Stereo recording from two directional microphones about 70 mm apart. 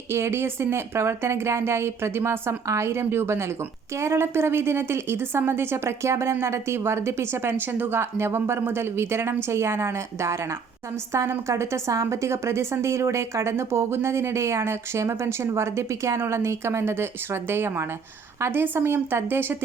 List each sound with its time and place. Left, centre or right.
0.1 s a woman's voice: right